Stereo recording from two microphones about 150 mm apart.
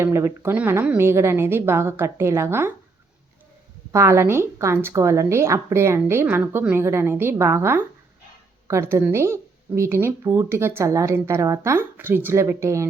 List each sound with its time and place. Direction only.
0.0 s speech: 15° right (ahead or behind)
3.9 s speech: 20° right (ahead or behind)